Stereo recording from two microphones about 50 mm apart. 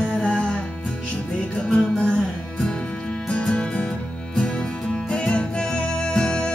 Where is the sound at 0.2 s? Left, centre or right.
Centre.